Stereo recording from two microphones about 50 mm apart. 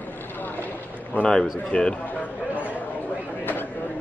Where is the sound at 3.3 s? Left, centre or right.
Left.